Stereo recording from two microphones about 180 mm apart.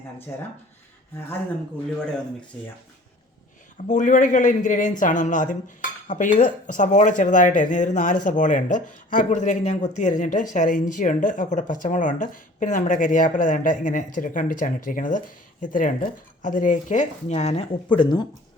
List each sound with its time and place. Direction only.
3.8 s speech: 45° left (ahead or behind); by 18.3 s 25° left (ahead or behind)